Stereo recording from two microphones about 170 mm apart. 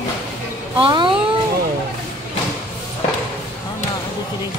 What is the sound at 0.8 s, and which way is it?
Speech, 25° right (ahead or behind).